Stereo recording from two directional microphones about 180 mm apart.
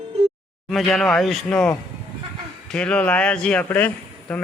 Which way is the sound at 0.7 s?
Centre (ahead or behind).